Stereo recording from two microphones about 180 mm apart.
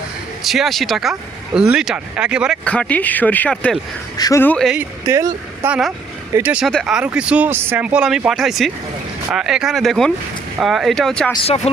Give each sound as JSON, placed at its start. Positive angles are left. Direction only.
{"t": 0.4, "sound": "speech", "side_deg": 0}
{"t": 2.6, "sound": "speech", "side_deg": 5}
{"t": 4.8, "sound": "speech", "side_deg": -15}
{"t": 11.4, "sound": "speech", "side_deg": 35}